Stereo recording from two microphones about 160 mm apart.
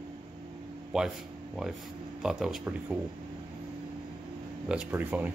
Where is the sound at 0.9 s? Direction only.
5° right (ahead or behind).